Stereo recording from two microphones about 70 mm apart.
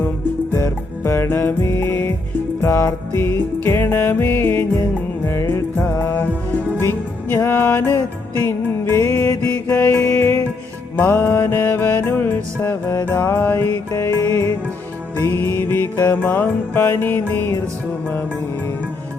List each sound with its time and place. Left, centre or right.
0.5 s music: left
9.4 s music: left